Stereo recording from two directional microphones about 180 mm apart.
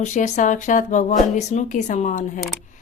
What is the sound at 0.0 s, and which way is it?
A woman's voice, 40° left (ahead or behind).